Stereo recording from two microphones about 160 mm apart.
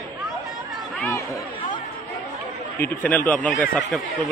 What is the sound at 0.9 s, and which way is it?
Chatter, 15° left (ahead or behind).